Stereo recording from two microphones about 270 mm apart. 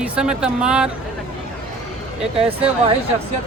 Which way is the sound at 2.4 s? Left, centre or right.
Right.